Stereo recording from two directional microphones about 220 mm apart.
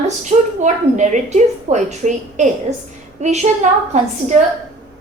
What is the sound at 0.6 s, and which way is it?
A woman's voice, 35° right (ahead or behind).